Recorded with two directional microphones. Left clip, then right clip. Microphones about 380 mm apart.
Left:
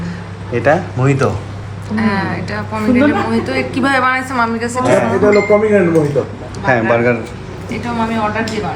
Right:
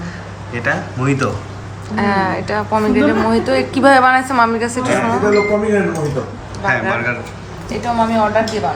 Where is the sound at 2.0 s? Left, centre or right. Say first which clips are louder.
Right 2 dB; right.